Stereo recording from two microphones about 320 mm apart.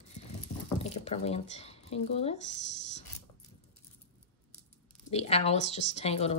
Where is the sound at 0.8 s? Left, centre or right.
Centre.